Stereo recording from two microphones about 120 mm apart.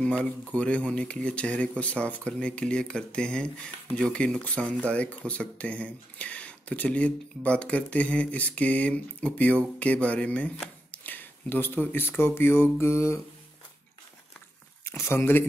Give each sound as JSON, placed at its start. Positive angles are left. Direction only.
{"t": 0.2, "sound": "speech", "side_deg": 10}
{"t": 14.9, "sound": "speech", "side_deg": 20}